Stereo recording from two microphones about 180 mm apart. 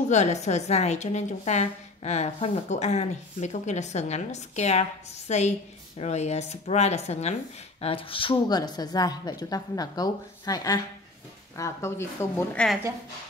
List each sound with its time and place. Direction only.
0.1 s a woman's voice: 40° left (ahead or behind); by 12.6 s 15° left (ahead or behind)